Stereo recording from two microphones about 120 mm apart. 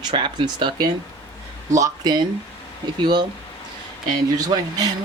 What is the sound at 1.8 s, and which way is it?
Speech, 35° right (ahead or behind).